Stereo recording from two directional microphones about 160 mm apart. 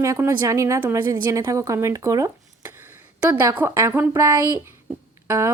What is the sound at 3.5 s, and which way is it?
A woman's voice, 15° right (ahead or behind).